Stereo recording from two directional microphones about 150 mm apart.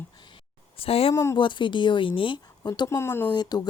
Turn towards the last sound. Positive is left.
turn(degrees=30)  # may be behind; listen again after turning